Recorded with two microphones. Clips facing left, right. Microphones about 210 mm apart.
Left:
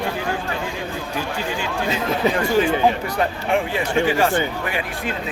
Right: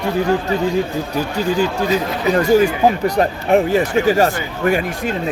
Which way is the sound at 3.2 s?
40° right (ahead or behind).